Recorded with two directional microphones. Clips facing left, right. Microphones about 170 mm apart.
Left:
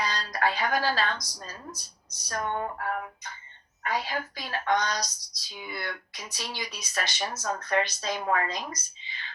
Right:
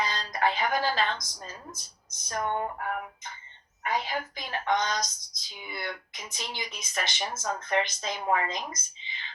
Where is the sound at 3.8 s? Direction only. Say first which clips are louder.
Even; 20° right (ahead or behind).